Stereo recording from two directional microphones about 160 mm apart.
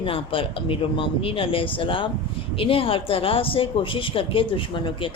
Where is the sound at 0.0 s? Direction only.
35° left (ahead or behind).